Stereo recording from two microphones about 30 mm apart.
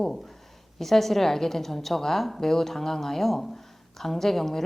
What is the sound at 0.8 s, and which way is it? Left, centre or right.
Speech, centre.